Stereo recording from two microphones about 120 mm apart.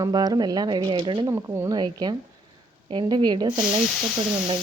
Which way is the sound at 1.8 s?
35° right (ahead or behind).